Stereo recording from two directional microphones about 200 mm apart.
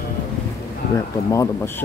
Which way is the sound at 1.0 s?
15° left (ahead or behind).